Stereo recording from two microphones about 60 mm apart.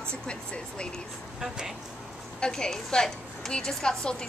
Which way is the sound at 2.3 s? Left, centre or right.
Centre.